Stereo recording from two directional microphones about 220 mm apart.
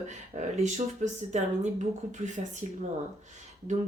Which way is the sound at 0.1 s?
30° right (ahead or behind).